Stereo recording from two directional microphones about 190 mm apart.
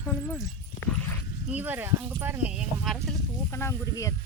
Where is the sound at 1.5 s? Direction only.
10° right (ahead or behind).